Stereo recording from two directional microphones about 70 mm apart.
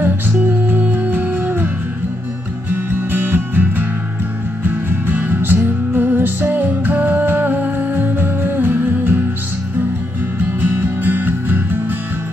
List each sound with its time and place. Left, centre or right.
0.0 s music: right
2.7 s music: right
10.6 s music: right